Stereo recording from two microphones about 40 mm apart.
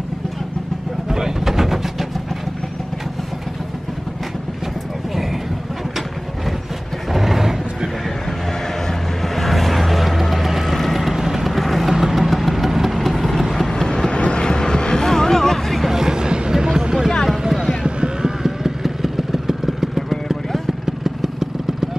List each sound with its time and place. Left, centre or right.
1.0 s vehicle: centre
7.1 s vehicle: centre
8.8 s music: centre
10.3 s a sound: centre
10.7 s vehicle: centre
11.1 s vehicle: centre
11.4 s vehicle: centre
13.6 s vehicle: centre
15.9 s a sound: centre
18.4 s vehicle: centre
20.8 s vehicle: centre